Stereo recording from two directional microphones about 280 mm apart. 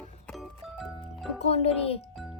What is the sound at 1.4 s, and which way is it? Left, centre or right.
Music, left.